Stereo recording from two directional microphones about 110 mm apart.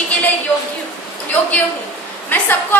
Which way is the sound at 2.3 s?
20° left (ahead or behind).